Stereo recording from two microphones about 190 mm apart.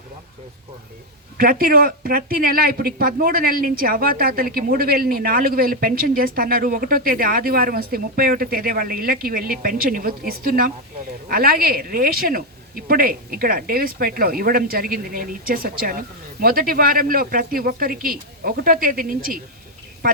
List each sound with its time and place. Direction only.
1.4 s speech: 50° right (ahead or behind)